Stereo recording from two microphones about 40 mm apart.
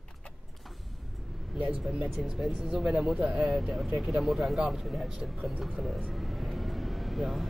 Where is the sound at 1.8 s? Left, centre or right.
Centre.